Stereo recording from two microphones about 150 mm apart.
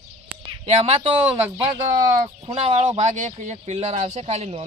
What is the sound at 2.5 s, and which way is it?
Speech, 40° right (ahead or behind).